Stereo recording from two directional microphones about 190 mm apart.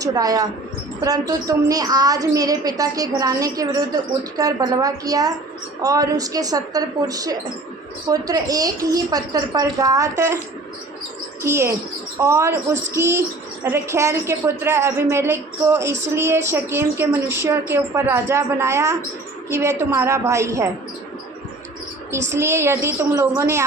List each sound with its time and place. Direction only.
0.0 s a woman's voice: 20° right (ahead or behind)
11.4 s a woman's voice: 15° right (ahead or behind)
22.3 s a woman's voice: 15° right (ahead or behind)